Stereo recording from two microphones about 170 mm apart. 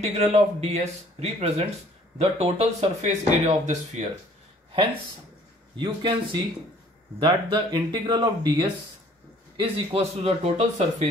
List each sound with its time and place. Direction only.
0.0 s speech: 40° right (ahead or behind)
5.8 s speech: 25° right (ahead or behind)